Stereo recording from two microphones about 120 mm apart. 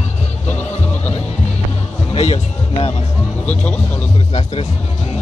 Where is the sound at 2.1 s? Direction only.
60° left (ahead or behind).